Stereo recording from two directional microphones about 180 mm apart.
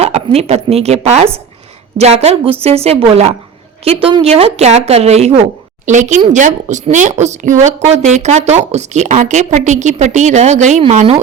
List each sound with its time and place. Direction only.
0.0 s a woman's voice: 35° right (ahead or behind)